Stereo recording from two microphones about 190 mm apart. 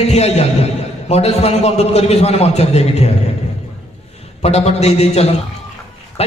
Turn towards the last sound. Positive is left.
turn(degrees=35)  # may be behind; listen again after turning